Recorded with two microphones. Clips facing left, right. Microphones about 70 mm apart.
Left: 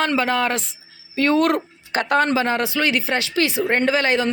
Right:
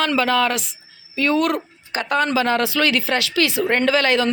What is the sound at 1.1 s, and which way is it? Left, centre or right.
Speech, left.